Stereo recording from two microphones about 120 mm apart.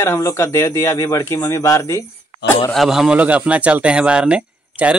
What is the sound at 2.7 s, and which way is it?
Speech, centre (ahead or behind).